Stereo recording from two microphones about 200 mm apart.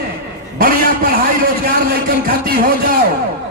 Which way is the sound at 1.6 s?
45° right (ahead or behind).